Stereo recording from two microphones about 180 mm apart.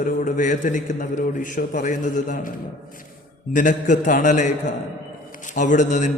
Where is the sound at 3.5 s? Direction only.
45° left (ahead or behind).